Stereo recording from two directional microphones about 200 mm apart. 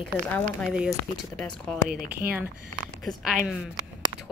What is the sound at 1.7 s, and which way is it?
Speech, centre (ahead or behind).